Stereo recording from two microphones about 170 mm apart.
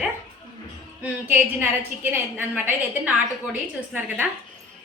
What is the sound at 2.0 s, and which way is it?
A woman's voice, 10° right (ahead or behind).